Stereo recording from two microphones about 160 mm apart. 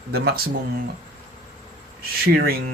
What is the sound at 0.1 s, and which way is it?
Speech, 75° right (ahead or behind).